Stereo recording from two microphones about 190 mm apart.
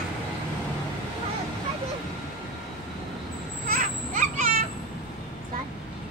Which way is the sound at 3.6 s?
45° right (ahead or behind).